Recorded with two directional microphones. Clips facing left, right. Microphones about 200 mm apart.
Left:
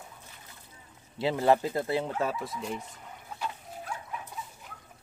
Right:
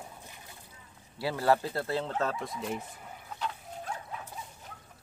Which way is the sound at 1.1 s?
20° left (ahead or behind).